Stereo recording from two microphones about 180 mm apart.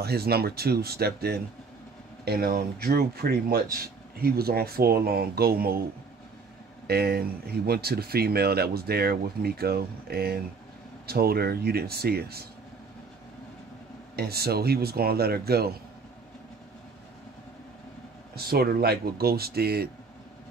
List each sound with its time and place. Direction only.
0.0 s speech: 60° right (ahead or behind)
6.9 s speech: 60° right (ahead or behind)
14.1 s speech: 60° right (ahead or behind)
18.3 s speech: 60° right (ahead or behind)